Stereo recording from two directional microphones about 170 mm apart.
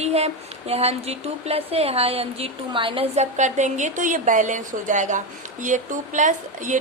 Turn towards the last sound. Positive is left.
turn(degrees=-50)  # may be behind; listen again after turning